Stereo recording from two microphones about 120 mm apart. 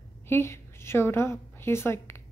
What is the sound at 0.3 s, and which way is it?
A woman's voice, 20° left (ahead or behind).